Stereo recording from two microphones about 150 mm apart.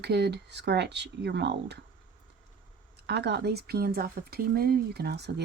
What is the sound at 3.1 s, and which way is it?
Speech, 90° right.